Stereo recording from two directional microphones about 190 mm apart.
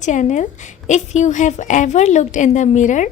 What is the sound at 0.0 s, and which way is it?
A woman's voice, 40° left (ahead or behind).